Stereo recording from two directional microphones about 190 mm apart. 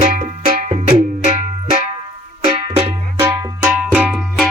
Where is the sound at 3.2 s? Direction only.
10° right (ahead or behind).